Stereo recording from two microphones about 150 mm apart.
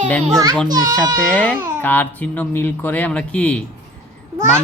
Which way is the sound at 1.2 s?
5° left (ahead or behind).